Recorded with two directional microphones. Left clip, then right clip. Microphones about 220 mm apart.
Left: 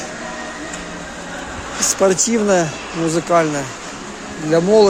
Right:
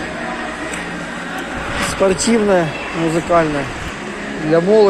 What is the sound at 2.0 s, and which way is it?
Speech, 40° left (ahead or behind).